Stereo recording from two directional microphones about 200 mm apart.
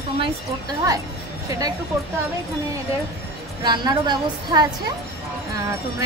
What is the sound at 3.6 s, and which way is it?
A woman's voice, 20° right (ahead or behind).